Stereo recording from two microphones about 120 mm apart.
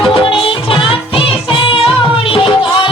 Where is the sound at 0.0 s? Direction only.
45° left (ahead or behind).